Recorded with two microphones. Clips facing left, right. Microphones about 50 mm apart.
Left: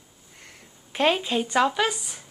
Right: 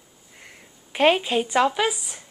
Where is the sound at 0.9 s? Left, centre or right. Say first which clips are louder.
Right 3 dB; right.